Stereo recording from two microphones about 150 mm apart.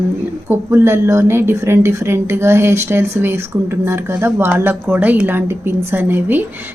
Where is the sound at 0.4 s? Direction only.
15° right (ahead or behind).